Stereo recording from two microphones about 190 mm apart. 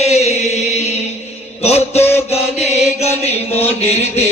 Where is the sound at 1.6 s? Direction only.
35° left (ahead or behind).